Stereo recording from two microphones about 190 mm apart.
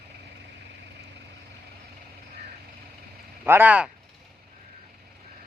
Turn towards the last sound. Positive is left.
turn(degrees=-5)  # may be behind; listen again after turning